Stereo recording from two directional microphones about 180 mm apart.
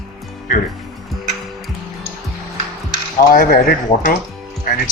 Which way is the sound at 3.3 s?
55° left (ahead or behind).